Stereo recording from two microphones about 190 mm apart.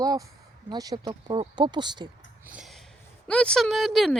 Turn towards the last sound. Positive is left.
turn(degrees=0)  # may be behind; listen again after turning